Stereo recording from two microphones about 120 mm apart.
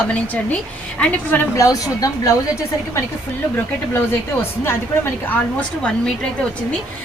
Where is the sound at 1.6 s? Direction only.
30° left (ahead or behind).